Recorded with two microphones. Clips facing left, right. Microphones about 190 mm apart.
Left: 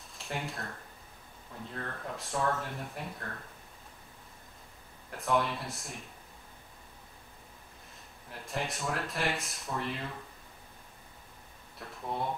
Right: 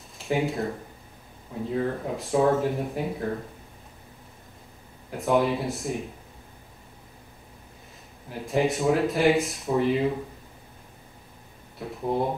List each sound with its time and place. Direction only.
0.2 s speech: centre (ahead or behind)
1.7 s speech: 5° right (ahead or behind)
5.1 s speech: centre (ahead or behind)
8.3 s speech: centre (ahead or behind)
12.0 s speech: 30° right (ahead or behind)